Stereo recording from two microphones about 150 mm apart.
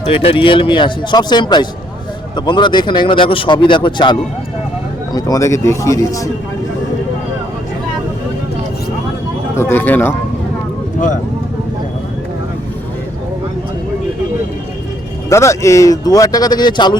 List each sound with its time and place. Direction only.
0.0 s a man's voice: 40° left (ahead or behind); by 6.3 s 20° left (ahead or behind)
9.6 s speech: 15° left (ahead or behind)
15.3 s a man's voice: 20° left (ahead or behind)